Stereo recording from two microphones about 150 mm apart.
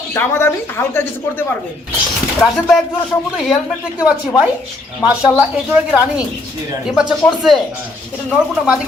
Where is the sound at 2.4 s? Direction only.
5° left (ahead or behind).